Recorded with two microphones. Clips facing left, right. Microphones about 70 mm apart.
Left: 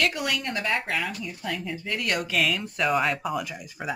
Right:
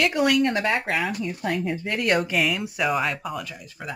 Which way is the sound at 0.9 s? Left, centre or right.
Centre.